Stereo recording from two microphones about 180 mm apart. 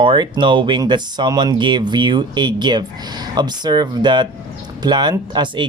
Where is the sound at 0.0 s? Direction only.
25° right (ahead or behind).